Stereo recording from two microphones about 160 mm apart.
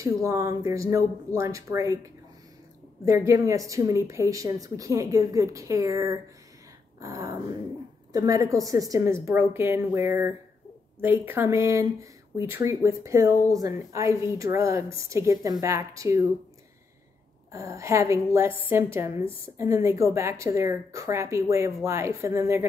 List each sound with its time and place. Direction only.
0.0 s speech: 20° right (ahead or behind)
3.1 s speech: 20° right (ahead or behind)
17.5 s speech: 20° right (ahead or behind)